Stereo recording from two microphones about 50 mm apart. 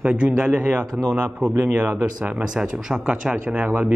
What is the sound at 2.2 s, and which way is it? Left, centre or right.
Speech, centre.